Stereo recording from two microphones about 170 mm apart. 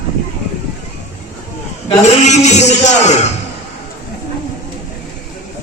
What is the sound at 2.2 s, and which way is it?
A man's voice, 45° left (ahead or behind).